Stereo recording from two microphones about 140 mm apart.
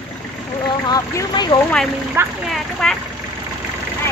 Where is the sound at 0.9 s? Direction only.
30° left (ahead or behind).